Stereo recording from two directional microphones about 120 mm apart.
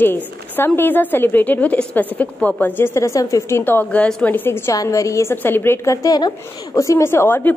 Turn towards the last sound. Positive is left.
turn(degrees=20)  # may be behind; listen again after turning